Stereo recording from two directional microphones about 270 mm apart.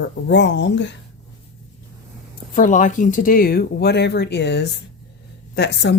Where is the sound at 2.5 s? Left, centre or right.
Left.